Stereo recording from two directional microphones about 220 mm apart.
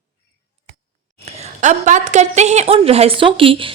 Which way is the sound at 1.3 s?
30° right (ahead or behind).